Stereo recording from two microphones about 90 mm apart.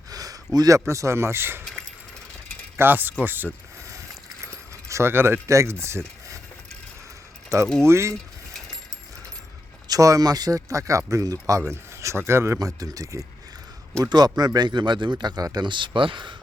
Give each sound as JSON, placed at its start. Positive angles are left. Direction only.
{"t": 0.1, "sound": "a sound", "side_deg": -45}
{"t": 0.9, "sound": "speech", "side_deg": -30}
{"t": 2.7, "sound": "speech", "side_deg": -25}
{"t": 3.8, "sound": "coin", "side_deg": -35}
{"t": 4.9, "sound": "speech", "side_deg": -30}
{"t": 7.8, "sound": "speech", "side_deg": -30}
{"t": 9.9, "sound": "speech", "side_deg": -40}
{"t": 12.5, "sound": "speech", "side_deg": -40}
{"t": 15.2, "sound": "speech", "side_deg": -50}
{"t": 15.6, "sound": "speech", "side_deg": -60}